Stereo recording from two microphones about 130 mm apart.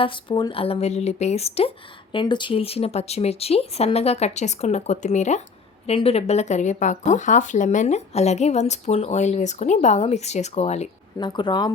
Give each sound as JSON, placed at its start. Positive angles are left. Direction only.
{"t": 0.0, "sound": "speech", "side_deg": 40}
{"t": 2.1, "sound": "speech", "side_deg": 35}
{"t": 5.8, "sound": "speech", "side_deg": 50}
{"t": 11.2, "sound": "speech", "side_deg": 35}